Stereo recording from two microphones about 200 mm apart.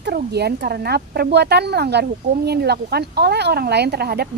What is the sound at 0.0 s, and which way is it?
Speech, 55° right (ahead or behind).